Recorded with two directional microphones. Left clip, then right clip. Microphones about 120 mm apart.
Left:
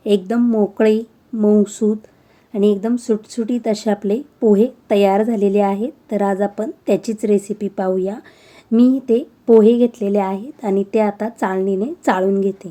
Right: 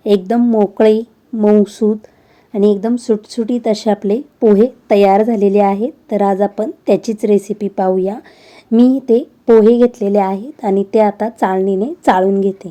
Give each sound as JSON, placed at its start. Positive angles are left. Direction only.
{"t": 0.0, "sound": "speech", "side_deg": -30}